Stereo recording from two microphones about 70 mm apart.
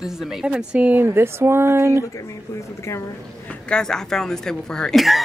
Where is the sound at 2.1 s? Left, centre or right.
Left.